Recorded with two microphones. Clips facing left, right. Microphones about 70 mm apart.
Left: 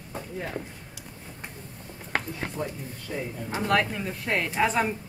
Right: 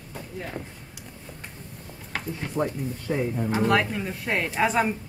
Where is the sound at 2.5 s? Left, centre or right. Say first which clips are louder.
Right 6 dB; right.